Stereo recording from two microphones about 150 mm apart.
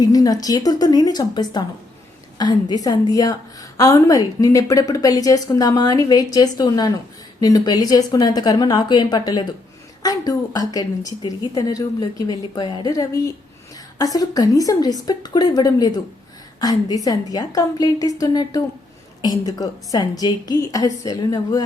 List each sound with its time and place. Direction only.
0.0 s a woman's voice: 25° left (ahead or behind)